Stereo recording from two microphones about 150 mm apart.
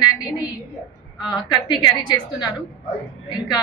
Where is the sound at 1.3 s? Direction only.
30° left (ahead or behind).